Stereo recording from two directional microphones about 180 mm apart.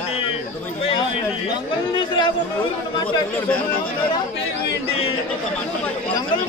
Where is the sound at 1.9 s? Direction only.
25° left (ahead or behind).